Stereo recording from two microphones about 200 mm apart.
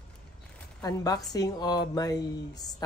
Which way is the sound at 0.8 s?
20° left (ahead or behind).